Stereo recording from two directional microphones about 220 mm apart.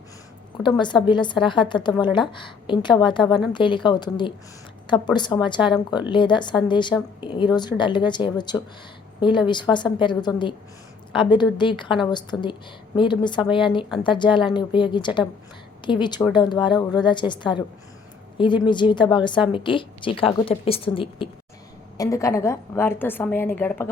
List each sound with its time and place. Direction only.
0.6 s a woman's voice: 20° left (ahead or behind)